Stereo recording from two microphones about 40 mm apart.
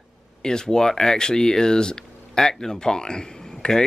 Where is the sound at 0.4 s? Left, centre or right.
Centre.